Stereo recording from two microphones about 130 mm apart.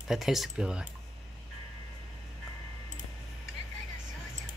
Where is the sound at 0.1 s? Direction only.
Centre (ahead or behind).